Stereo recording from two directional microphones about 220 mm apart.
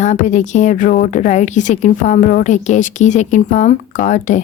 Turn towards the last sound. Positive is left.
turn(degrees=35)  # may be behind; listen again after turning